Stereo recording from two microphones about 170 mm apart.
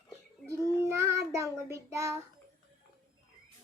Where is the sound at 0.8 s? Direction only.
15° right (ahead or behind).